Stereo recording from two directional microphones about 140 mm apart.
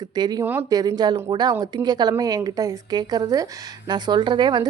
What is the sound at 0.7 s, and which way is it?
Speech, 25° right (ahead or behind).